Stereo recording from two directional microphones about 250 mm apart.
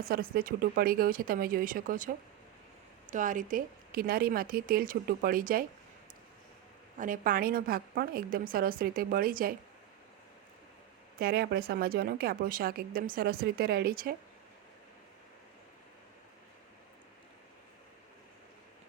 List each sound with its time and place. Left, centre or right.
0.0 s a woman's voice: right
6.9 s a woman's voice: right
11.2 s a woman's voice: right